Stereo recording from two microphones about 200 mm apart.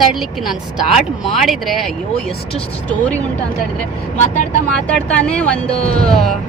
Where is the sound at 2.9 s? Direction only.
5° left (ahead or behind).